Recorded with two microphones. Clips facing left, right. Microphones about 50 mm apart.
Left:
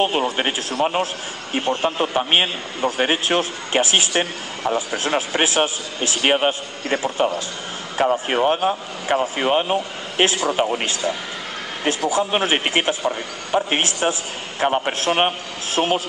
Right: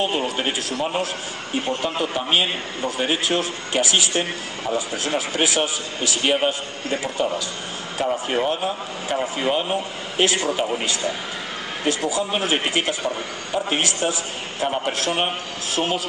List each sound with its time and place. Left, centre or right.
0.0 s a man's voice: left